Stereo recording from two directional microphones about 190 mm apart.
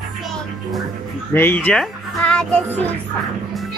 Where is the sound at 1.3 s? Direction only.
10° left (ahead or behind).